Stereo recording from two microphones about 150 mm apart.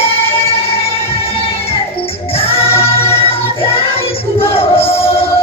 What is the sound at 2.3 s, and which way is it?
Music, 40° left (ahead or behind).